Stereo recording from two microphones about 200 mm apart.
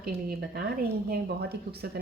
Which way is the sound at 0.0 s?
50° right (ahead or behind).